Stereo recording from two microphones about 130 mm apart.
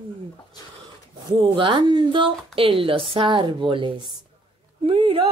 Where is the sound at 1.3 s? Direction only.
40° right (ahead or behind).